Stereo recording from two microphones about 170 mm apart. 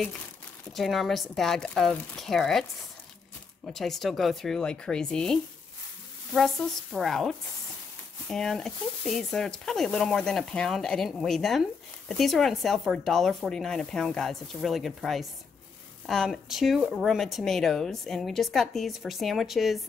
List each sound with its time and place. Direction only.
0.7 s speech: centre (ahead or behind)
3.6 s speech: centre (ahead or behind)